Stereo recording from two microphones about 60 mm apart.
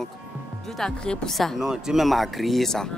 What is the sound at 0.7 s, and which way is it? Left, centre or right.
Speech, centre.